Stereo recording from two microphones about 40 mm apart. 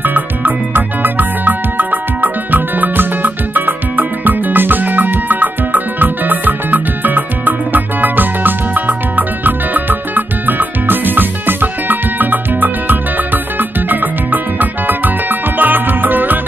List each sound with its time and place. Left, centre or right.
0.0 s music: right